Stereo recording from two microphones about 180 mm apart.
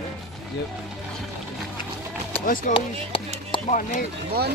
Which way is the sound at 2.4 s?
50° left (ahead or behind).